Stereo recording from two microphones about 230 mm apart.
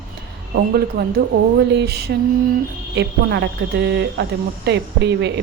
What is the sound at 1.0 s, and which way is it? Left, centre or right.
A woman's voice, right.